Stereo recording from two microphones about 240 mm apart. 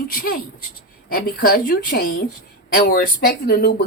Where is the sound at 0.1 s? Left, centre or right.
Left.